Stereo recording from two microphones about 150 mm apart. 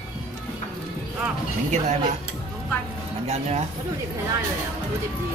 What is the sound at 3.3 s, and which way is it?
Speech, 45° right (ahead or behind).